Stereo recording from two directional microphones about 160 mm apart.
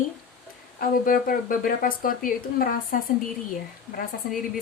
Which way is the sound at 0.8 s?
60° left (ahead or behind).